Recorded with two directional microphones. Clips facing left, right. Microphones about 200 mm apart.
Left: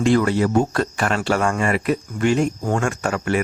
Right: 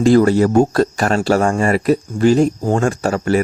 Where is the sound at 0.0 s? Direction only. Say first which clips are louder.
Right 6 dB; 40° right (ahead or behind).